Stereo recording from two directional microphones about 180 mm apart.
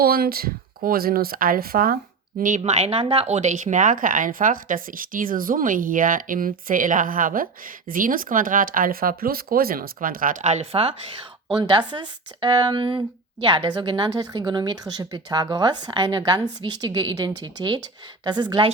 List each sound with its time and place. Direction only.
0.0 s speech: 55° right (ahead or behind)
2.4 s speech: 40° right (ahead or behind); by 18.7 s 25° right (ahead or behind)